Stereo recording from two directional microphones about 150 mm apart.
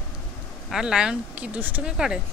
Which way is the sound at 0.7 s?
5° right (ahead or behind).